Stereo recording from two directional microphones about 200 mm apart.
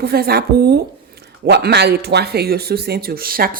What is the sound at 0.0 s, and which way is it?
Speech, 50° right (ahead or behind).